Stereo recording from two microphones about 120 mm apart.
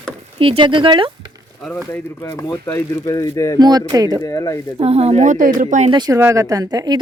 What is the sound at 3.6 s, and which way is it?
Speech, 35° right (ahead or behind).